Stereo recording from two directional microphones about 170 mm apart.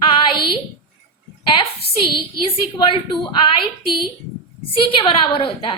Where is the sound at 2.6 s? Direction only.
30° left (ahead or behind).